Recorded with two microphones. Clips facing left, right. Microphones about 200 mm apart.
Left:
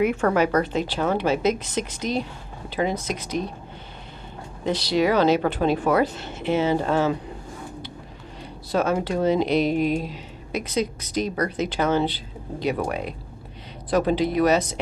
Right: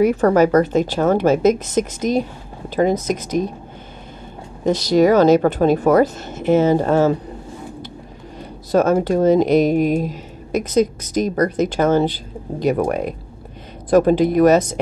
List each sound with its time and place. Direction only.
0.0 s a woman's voice: 35° right (ahead or behind)
4.6 s a woman's voice: 45° right (ahead or behind)
8.7 s a woman's voice: 45° right (ahead or behind)